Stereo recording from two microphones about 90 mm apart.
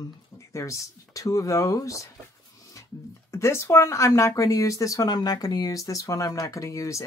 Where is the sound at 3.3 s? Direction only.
30° left (ahead or behind).